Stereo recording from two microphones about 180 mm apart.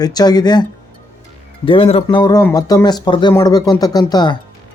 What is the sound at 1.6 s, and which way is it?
Speech, 30° left (ahead or behind).